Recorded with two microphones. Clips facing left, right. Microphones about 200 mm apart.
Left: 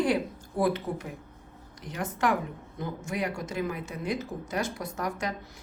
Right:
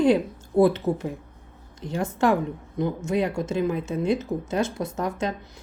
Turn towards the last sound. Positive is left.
turn(degrees=-25)  # may be behind; listen again after turning